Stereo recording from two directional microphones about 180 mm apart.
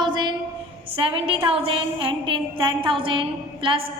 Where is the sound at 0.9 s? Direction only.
30° right (ahead or behind).